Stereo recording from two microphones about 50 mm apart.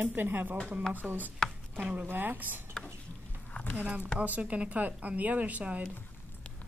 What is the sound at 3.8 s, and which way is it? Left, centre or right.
A woman's voice, right.